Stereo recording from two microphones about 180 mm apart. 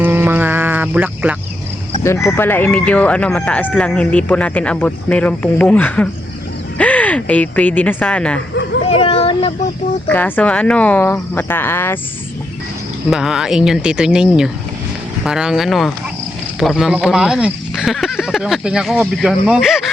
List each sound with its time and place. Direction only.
0.0 s music: 10° right (ahead or behind)
2.0 s speech: 15° left (ahead or behind)
8.9 s a sound: 35° left (ahead or behind)
10.1 s speech: 10° left (ahead or behind)
13.1 s speech: 5° right (ahead or behind)